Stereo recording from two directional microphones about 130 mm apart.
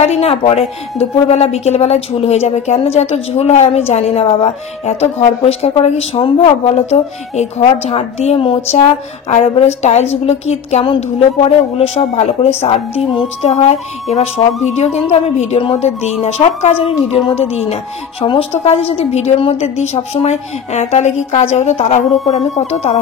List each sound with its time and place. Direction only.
0.0 s a woman's voice: 55° left (ahead or behind)